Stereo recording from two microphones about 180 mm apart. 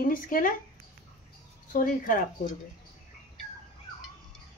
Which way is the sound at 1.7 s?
50° left (ahead or behind).